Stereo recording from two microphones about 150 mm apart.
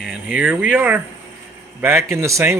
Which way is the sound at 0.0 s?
5° right (ahead or behind).